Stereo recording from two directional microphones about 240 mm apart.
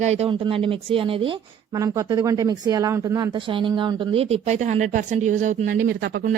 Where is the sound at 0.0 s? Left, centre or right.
Right.